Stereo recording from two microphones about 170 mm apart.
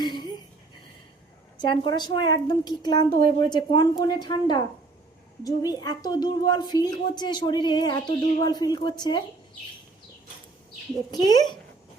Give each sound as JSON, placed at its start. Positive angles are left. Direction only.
{"t": 0.0, "sound": "a sound", "side_deg": 25}
{"t": 1.5, "sound": "a woman's voice", "side_deg": 30}
{"t": 11.1, "sound": "a woman's voice", "side_deg": 25}